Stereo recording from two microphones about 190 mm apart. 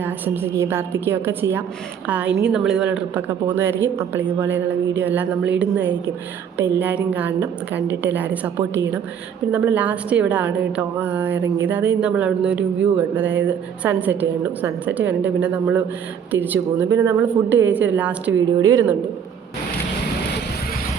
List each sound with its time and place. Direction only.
0.0 s a woman's voice: 10° right (ahead or behind)